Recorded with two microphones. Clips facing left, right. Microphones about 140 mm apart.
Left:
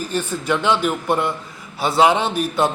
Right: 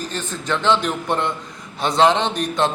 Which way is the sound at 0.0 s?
10° left (ahead or behind).